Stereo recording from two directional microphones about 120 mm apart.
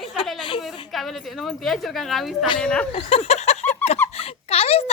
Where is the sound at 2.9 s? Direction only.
60° left (ahead or behind).